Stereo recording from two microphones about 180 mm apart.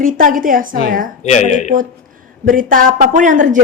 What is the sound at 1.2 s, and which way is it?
Speech, 40° left (ahead or behind).